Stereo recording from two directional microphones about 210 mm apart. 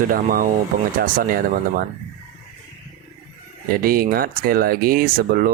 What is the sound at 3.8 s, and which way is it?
Speech, 45° right (ahead or behind).